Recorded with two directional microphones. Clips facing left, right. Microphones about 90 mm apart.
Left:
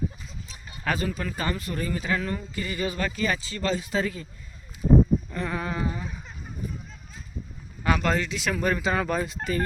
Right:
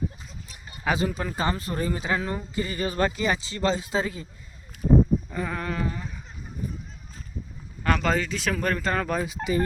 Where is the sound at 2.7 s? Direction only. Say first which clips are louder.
Right 3 dB; 40° right (ahead or behind).